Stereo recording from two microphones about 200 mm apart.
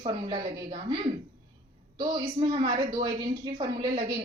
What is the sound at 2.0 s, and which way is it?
A woman's voice, 25° right (ahead or behind).